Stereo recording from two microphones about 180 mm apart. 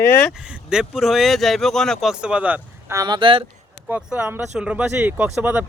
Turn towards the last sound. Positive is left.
turn(degrees=-5)  # may be behind; listen again after turning